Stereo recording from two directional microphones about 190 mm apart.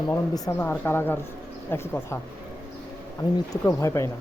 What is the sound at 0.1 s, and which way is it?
Speech, 15° left (ahead or behind).